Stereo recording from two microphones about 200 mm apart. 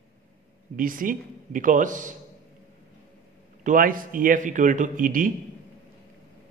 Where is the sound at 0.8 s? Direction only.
45° right (ahead or behind).